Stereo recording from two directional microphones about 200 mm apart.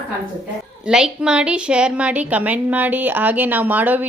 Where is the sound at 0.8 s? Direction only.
5° right (ahead or behind).